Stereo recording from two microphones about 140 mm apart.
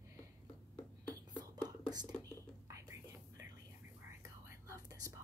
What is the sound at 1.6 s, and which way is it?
Whispering, 30° right (ahead or behind).